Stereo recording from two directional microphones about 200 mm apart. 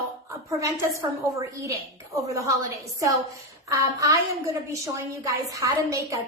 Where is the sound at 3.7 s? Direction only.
15° right (ahead or behind).